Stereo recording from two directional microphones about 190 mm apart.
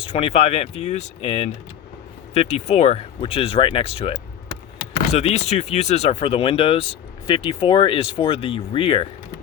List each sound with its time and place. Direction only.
0.0 s speech: 30° left (ahead or behind)